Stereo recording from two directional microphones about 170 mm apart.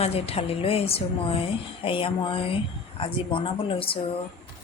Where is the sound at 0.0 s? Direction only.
35° left (ahead or behind).